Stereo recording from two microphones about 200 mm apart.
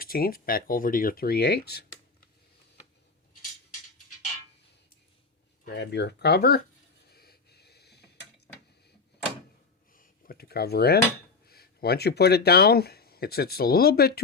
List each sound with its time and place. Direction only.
0.0 s speech: 50° left (ahead or behind)
5.6 s speech: 55° left (ahead or behind)
7.1 s a sound: 50° left (ahead or behind)
9.9 s speech: 45° left (ahead or behind)